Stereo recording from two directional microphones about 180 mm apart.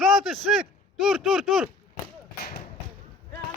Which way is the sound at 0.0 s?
Centre (ahead or behind).